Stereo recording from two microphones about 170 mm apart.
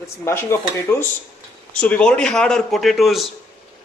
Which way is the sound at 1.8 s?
5° left (ahead or behind).